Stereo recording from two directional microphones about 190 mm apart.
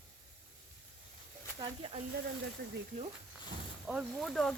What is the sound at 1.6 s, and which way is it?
Speech, 25° right (ahead or behind).